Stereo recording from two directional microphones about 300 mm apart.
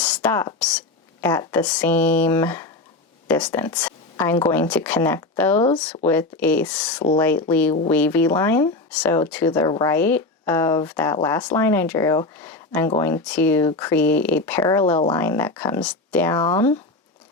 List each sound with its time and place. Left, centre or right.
0.0 s speech: centre